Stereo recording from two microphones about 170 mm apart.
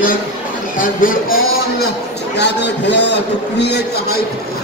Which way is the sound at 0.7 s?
55° left (ahead or behind).